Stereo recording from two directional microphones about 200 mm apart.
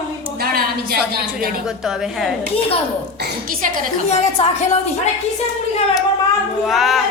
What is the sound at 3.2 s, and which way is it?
Speech, 45° right (ahead or behind).